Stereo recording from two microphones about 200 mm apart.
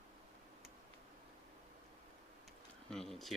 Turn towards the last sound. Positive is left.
turn(degrees=0)  # may be behind; listen again after turning